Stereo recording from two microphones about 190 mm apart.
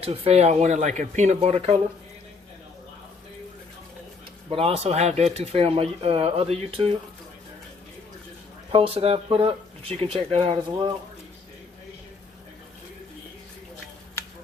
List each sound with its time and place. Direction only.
0.0 s speech: 30° right (ahead or behind)
4.4 s speech: 30° right (ahead or behind)
8.7 s speech: 30° right (ahead or behind)